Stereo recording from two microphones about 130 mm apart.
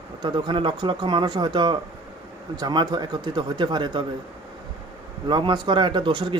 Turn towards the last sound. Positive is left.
turn(degrees=-40)  # may be behind; listen again after turning